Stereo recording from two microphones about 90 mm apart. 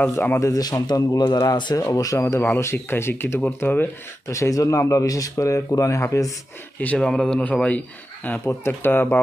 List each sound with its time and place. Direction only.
0.0 s speech: 25° left (ahead or behind)
0.5 s speech: 45° left (ahead or behind); by 3.9 s 20° left (ahead or behind)
4.3 s speech: 35° left (ahead or behind)
6.8 s a man's voice: 15° left (ahead or behind)